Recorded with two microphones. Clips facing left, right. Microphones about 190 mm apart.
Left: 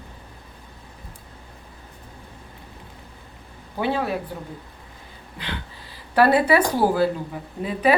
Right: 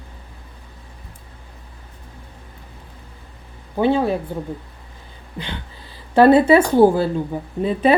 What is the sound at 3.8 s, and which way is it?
Speech, 25° right (ahead or behind).